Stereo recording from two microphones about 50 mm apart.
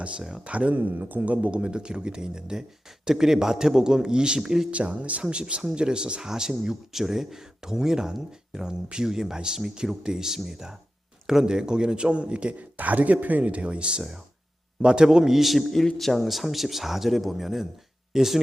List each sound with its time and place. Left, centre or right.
0.2 s speech: centre
0.4 s a man's voice: right
0.8 s speech: right; by 4.7 s centre
4.7 s a man's voice: right; by 18.3 s centre